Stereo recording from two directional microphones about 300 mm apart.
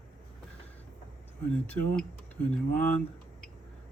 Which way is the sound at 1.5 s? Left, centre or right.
Centre.